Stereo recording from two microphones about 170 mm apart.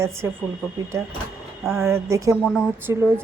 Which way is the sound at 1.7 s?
15° right (ahead or behind).